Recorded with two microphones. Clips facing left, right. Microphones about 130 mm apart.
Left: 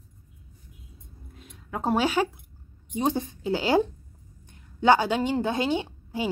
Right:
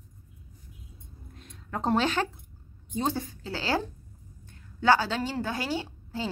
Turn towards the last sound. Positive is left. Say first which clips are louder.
# left 4 dB
turn(degrees=20)  # may be behind; listen again after turning